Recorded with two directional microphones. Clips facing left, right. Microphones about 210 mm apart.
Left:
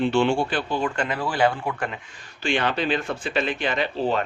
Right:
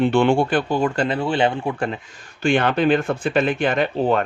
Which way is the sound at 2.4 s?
50° right (ahead or behind).